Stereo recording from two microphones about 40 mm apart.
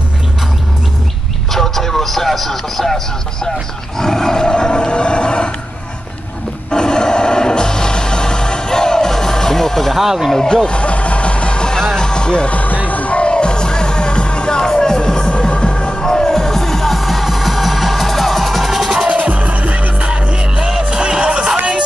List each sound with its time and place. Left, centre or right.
1.5 s a sound: centre
3.9 s roar: centre
6.7 s music: centre
9.9 s speech: centre
10.3 s music: centre
12.8 s music: left
16.0 s music: centre
19.0 s music: right
20.5 s music: centre